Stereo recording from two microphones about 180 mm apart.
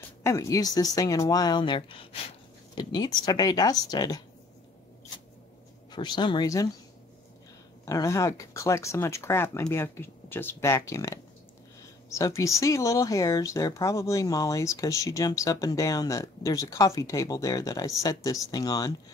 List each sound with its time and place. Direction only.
0.2 s speech: 15° left (ahead or behind)
5.9 s speech: 25° left (ahead or behind)
7.8 s speech: 15° left (ahead or behind)